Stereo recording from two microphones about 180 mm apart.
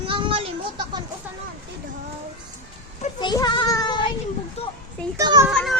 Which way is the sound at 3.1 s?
25° left (ahead or behind).